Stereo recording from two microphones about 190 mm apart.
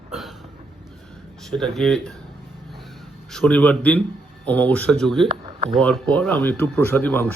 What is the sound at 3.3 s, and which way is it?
Speech, 5° left (ahead or behind).